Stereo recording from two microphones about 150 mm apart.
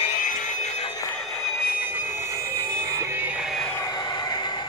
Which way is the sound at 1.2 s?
Centre (ahead or behind).